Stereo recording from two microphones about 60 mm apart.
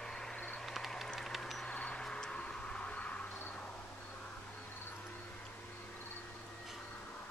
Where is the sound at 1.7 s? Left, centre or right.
Centre.